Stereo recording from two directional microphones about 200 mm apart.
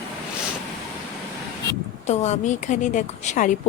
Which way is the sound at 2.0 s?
35° left (ahead or behind).